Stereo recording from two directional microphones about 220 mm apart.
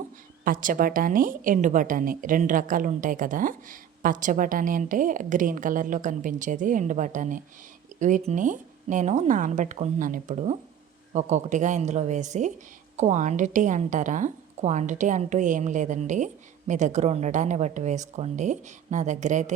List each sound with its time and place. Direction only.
0.4 s a woman's voice: 40° right (ahead or behind)